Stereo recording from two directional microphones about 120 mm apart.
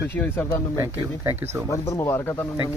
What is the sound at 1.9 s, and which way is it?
Speech, 20° left (ahead or behind).